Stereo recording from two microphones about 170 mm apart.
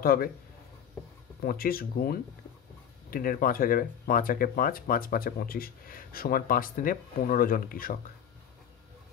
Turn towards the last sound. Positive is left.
turn(degrees=55)  # may be behind; listen again after turning